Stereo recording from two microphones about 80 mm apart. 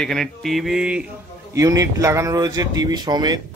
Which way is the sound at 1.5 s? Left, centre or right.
Right.